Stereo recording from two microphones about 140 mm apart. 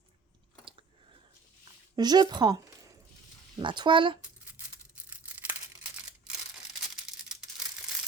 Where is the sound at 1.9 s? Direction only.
30° right (ahead or behind).